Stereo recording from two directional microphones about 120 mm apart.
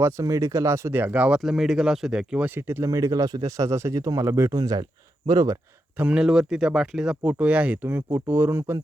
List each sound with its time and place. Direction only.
0.0 s speech: 25° right (ahead or behind); by 2.5 s 5° right (ahead or behind)
2.6 s speech: 20° right (ahead or behind)
6.0 s speech: 10° right (ahead or behind)